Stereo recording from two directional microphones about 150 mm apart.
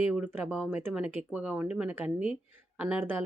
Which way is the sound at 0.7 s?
15° right (ahead or behind).